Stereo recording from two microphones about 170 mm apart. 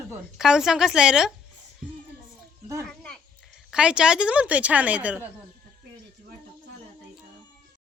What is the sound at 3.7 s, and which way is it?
A woman's voice, 5° right (ahead or behind).